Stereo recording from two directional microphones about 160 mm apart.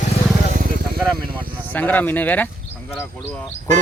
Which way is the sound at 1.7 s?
10° left (ahead or behind).